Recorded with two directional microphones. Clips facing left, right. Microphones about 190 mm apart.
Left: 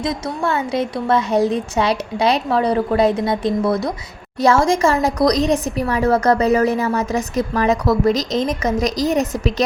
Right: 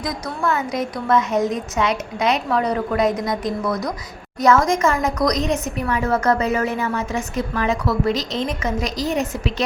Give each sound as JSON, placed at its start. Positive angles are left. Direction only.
{"t": 0.0, "sound": "a woman's voice", "side_deg": 25}